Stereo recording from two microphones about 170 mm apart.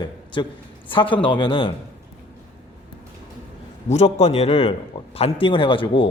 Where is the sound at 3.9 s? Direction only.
40° left (ahead or behind).